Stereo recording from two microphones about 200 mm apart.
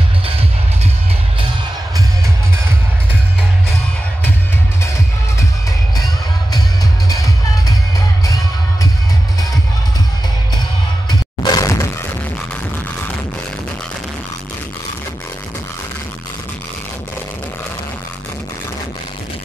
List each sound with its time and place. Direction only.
6.5 s music: 20° left (ahead or behind)
11.1 s music: 15° left (ahead or behind)